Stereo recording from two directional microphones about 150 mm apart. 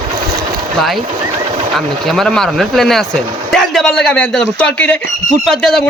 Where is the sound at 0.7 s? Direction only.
Centre (ahead or behind).